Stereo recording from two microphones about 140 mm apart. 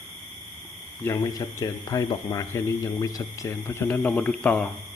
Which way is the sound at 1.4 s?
30° left (ahead or behind).